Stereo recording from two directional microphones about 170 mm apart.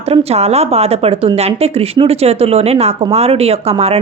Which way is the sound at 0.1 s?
35° right (ahead or behind).